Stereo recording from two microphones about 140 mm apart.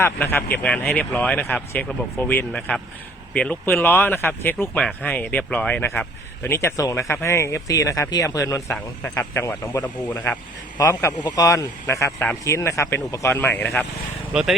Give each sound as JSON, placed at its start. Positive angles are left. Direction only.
{"t": 0.0, "sound": "speech", "side_deg": 15}
{"t": 10.8, "sound": "speech", "side_deg": 25}